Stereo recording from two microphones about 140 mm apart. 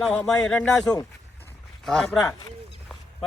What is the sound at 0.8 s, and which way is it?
Speech, 25° left (ahead or behind).